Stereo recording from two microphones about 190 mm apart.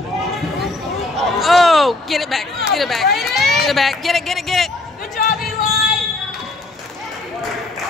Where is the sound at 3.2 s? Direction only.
Centre (ahead or behind).